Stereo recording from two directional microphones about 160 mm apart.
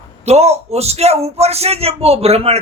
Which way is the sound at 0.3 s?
40° right (ahead or behind).